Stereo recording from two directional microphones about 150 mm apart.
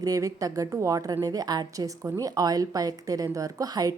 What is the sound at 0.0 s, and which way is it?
A woman's voice, 20° right (ahead or behind).